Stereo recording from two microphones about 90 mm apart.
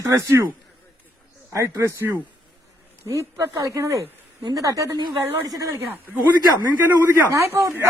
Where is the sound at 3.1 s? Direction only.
35° right (ahead or behind).